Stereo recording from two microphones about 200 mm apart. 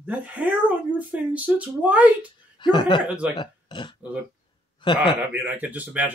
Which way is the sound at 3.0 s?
5° right (ahead or behind).